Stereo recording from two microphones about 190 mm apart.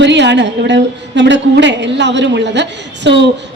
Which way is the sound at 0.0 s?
65° right (ahead or behind).